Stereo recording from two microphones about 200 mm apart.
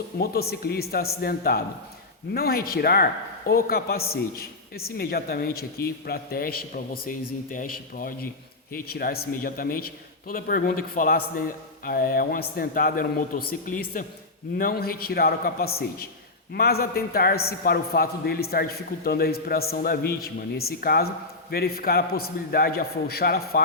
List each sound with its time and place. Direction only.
0.2 s a man's voice: 50° left (ahead or behind)